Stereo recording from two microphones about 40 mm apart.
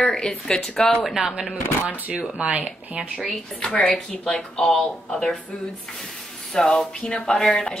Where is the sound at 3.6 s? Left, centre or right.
Left.